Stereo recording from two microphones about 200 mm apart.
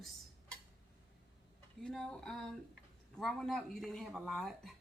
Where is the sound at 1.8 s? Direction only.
5° left (ahead or behind).